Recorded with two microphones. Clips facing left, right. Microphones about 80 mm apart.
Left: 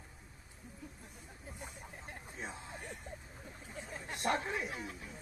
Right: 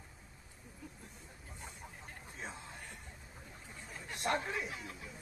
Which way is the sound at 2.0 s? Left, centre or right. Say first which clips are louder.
Left 2 dB; centre.